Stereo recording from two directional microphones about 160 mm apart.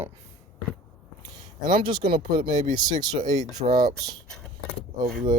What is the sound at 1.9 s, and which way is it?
Mantra, 30° right (ahead or behind).